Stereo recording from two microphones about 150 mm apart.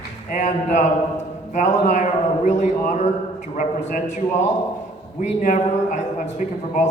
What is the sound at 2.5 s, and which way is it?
A man's voice, 55° left (ahead or behind).